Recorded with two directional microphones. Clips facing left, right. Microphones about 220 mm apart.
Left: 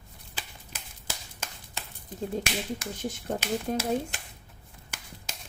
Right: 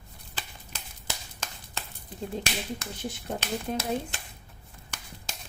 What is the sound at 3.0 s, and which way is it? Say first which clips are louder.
Speech: left 2 dB; 45° left (ahead or behind).